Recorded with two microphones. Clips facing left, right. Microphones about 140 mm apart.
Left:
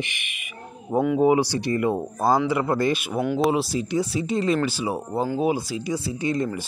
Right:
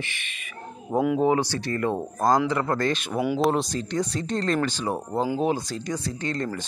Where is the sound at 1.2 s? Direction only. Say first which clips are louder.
Left 3 dB; 10° left (ahead or behind).